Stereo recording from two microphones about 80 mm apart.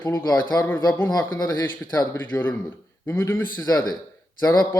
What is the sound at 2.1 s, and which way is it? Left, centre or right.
A man's voice, left.